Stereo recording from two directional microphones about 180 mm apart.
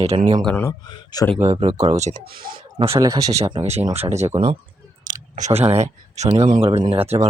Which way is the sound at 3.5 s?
35° right (ahead or behind).